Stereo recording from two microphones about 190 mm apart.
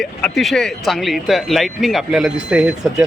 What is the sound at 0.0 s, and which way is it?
Speech, centre (ahead or behind).